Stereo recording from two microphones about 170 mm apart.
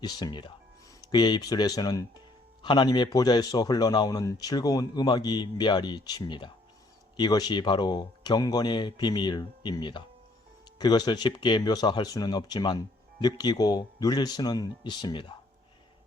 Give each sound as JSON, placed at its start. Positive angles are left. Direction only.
{"t": 0.0, "sound": "speech", "side_deg": 25}